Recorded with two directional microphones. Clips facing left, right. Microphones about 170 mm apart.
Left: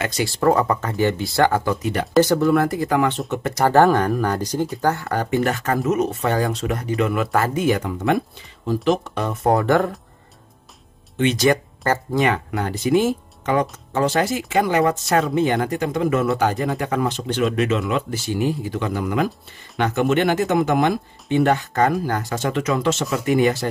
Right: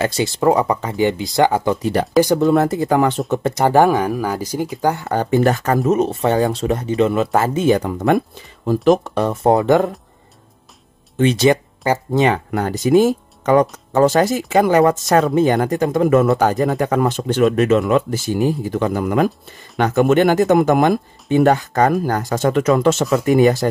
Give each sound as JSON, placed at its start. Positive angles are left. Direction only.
{"t": 0.0, "sound": "speech", "side_deg": -25}
{"t": 3.6, "sound": "speech", "side_deg": -15}
{"t": 8.6, "sound": "speech", "side_deg": -45}
{"t": 11.1, "sound": "speech", "side_deg": -35}
{"t": 11.4, "sound": "speech", "side_deg": -20}
{"t": 12.4, "sound": "speech", "side_deg": -45}